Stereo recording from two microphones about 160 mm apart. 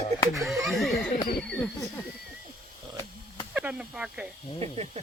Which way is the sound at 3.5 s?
10° right (ahead or behind).